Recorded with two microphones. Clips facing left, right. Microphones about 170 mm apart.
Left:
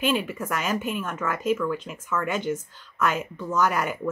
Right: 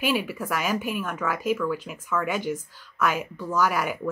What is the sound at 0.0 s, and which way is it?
Speech, 10° right (ahead or behind).